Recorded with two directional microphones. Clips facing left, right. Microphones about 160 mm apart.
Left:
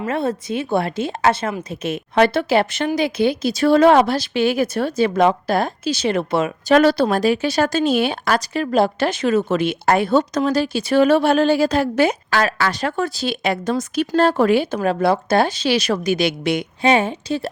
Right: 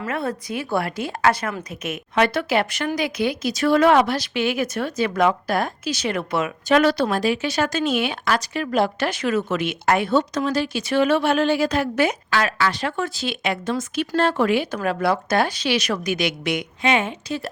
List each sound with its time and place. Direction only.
0.0 s a woman's voice: 25° left (ahead or behind)